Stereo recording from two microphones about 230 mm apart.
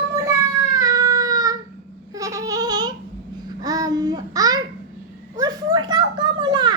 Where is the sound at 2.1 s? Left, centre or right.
Centre.